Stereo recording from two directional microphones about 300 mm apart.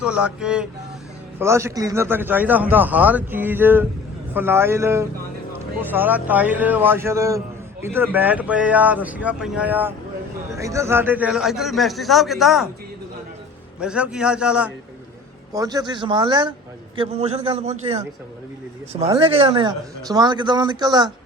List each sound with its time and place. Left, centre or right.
0.0 s a man's voice: centre
13.7 s a man's voice: centre